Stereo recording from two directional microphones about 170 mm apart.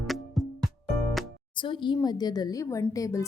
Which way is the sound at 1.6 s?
30° left (ahead or behind).